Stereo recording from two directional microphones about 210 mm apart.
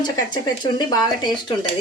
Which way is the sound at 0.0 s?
20° left (ahead or behind).